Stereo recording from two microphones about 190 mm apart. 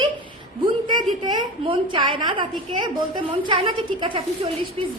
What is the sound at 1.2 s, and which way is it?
A woman's voice, 25° right (ahead or behind).